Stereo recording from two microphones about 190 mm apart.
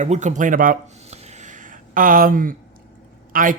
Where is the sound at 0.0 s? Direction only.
40° right (ahead or behind).